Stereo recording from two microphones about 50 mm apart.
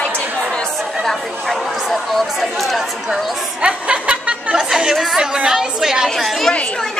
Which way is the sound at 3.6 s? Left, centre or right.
Right.